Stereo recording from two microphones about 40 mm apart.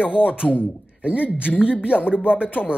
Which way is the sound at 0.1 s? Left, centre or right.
Right.